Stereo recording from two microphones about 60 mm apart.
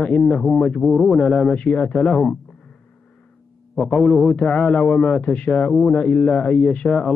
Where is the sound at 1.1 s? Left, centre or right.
Centre.